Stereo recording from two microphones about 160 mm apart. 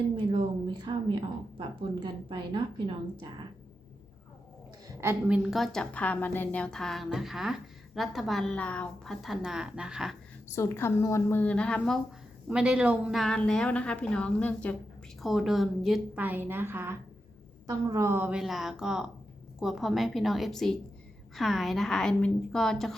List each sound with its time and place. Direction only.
0.3 s a woman's voice: 30° right (ahead or behind)
4.9 s a woman's voice: 15° right (ahead or behind)
5.4 s a woman's voice: centre (ahead or behind)
10.5 s a woman's voice: 15° left (ahead or behind)
12.5 s a woman's voice: 5° right (ahead or behind)
15.2 s a woman's voice: centre (ahead or behind)